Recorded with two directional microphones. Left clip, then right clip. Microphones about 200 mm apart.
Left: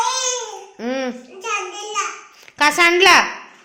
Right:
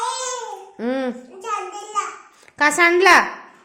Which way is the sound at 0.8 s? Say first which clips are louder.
Even; 20° right (ahead or behind).